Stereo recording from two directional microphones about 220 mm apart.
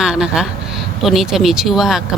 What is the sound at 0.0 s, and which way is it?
Speech, centre (ahead or behind).